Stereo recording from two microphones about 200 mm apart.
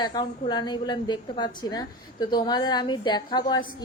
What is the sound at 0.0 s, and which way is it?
A woman's voice, 20° left (ahead or behind).